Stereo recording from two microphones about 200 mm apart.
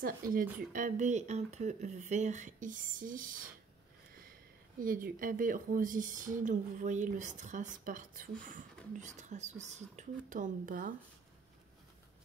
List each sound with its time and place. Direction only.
0.0 s speech: 45° right (ahead or behind)
4.7 s speech: 45° right (ahead or behind)